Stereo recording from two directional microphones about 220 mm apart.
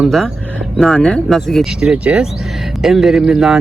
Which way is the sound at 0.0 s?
Centre (ahead or behind).